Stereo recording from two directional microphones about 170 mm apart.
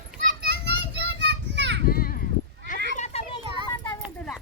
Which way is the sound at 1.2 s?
90° right.